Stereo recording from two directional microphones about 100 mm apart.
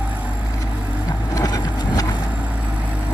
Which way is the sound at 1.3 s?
40° left (ahead or behind).